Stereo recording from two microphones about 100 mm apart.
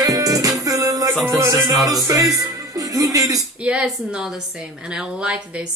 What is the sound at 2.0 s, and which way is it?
Speech, 35° right (ahead or behind).